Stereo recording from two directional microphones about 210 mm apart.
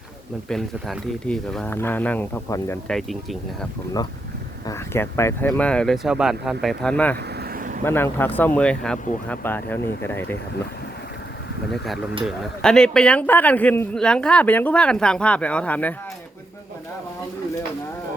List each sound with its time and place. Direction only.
0.4 s speech: 5° left (ahead or behind)
4.6 s a man's voice: 15° left (ahead or behind)
7.3 s vehicle: 40° right (ahead or behind)
7.9 s speech: 10° left (ahead or behind)
12.2 s a man's voice: centre (ahead or behind)